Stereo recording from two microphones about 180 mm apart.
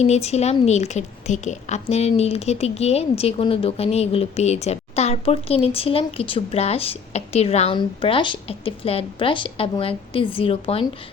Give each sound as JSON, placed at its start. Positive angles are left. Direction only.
{"t": 0.0, "sound": "a woman's voice", "side_deg": 35}